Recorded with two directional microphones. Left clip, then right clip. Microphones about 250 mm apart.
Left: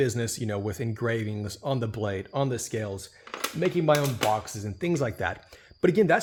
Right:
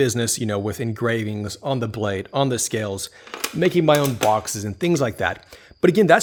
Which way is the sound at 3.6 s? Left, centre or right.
Right.